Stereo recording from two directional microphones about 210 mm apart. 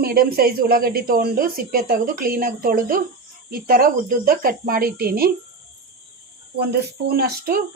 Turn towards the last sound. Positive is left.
turn(degrees=-45)  # may be behind; listen again after turning